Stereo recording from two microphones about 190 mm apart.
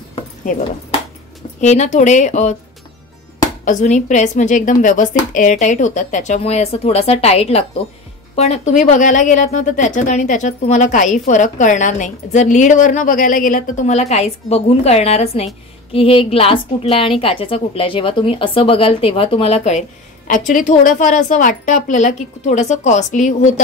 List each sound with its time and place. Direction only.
1.6 s speech: 40° left (ahead or behind)
3.6 s a woman's voice: 40° left (ahead or behind)